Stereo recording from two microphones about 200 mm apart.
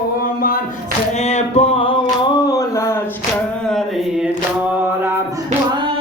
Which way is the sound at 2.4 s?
15° left (ahead or behind).